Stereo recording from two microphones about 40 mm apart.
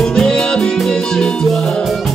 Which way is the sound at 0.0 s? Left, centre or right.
Centre.